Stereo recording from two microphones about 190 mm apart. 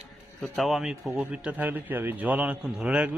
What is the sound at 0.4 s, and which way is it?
A man's voice, centre (ahead or behind).